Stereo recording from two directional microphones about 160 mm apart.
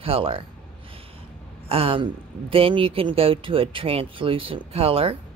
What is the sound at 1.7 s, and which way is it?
Speech, 35° right (ahead or behind).